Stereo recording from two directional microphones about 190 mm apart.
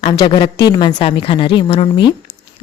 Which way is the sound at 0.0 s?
25° left (ahead or behind).